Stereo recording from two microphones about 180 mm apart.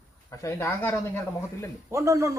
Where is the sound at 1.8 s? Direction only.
15° right (ahead or behind).